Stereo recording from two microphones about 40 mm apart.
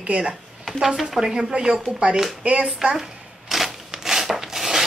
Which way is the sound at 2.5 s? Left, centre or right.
Right.